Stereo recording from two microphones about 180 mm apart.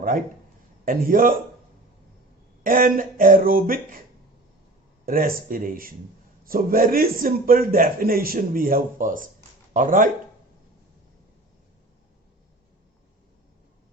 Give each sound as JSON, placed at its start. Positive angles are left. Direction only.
{"t": 0.9, "sound": "a man's voice", "side_deg": -50}
{"t": 2.6, "sound": "a man's voice", "side_deg": -50}
{"t": 5.0, "sound": "a man's voice", "side_deg": -50}